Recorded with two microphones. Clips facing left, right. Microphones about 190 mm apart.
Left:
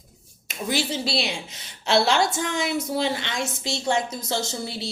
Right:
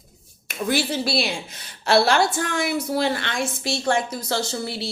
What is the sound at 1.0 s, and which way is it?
Speech, 20° left (ahead or behind).